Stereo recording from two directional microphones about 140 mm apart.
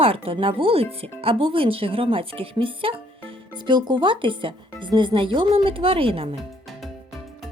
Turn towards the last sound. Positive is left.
turn(degrees=0)  # may be behind; listen again after turning